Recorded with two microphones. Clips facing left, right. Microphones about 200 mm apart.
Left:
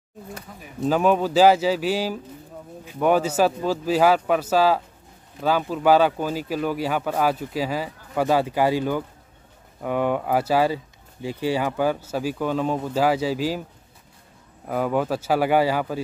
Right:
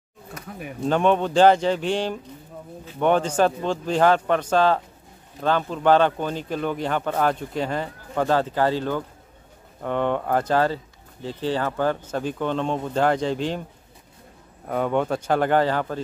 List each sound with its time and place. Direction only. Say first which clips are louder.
0.5 s speech: right 6 dB; 60° right (ahead or behind)
0.8 s speech: left 1 dB; 5° left (ahead or behind)
14.7 s speech: even; 5° left (ahead or behind)